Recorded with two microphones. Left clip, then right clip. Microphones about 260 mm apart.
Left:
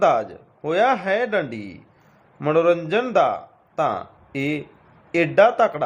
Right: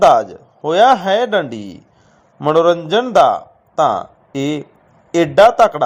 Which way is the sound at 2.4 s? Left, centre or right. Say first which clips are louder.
Right 6 dB; centre.